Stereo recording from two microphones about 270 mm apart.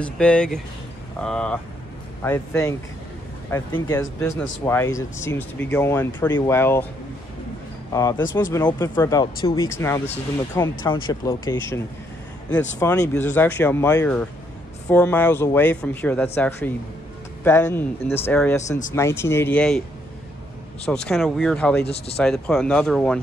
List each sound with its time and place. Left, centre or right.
0.0 s speech: centre
7.9 s speech: centre
20.8 s speech: centre
21.8 s speech: left
22.1 s speech: centre